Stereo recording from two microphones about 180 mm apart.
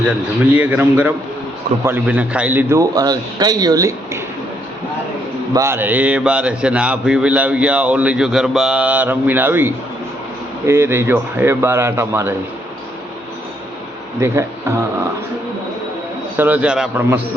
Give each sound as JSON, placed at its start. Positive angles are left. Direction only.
{"t": 0.5, "sound": "speech", "side_deg": -10}
{"t": 5.5, "sound": "speech", "side_deg": -15}
{"t": 14.2, "sound": "speech", "side_deg": -15}
{"t": 16.4, "sound": "speech", "side_deg": -10}